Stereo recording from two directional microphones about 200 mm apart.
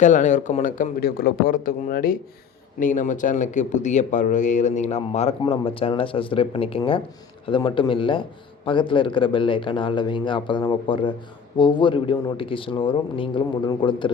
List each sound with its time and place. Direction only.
0.0 s a man's voice: 40° left (ahead or behind)